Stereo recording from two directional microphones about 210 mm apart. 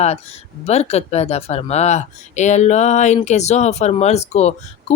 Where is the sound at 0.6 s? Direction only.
30° left (ahead or behind).